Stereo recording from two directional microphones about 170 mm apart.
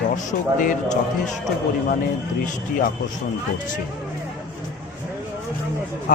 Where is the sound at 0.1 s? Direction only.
45° left (ahead or behind).